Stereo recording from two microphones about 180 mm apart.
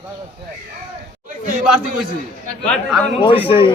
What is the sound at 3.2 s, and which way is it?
Speech, 30° left (ahead or behind).